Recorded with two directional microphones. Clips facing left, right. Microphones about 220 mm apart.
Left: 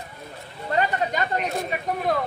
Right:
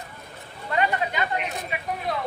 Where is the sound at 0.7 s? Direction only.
40° left (ahead or behind).